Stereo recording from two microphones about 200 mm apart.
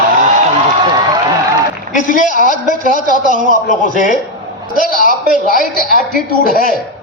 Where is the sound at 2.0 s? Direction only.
40° left (ahead or behind).